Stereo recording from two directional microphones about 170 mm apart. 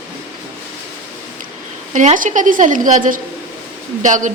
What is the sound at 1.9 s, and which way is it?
A woman's voice, 50° right (ahead or behind).